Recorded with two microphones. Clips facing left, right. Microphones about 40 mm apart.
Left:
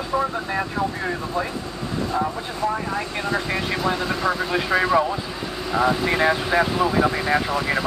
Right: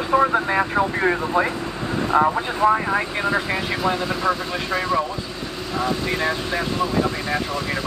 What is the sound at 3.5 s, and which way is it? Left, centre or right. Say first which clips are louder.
Speech: right 1 dB; centre.